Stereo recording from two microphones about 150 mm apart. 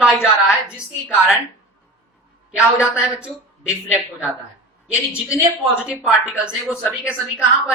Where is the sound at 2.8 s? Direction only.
5° right (ahead or behind).